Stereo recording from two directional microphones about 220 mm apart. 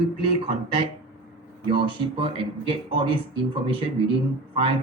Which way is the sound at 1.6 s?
25° right (ahead or behind).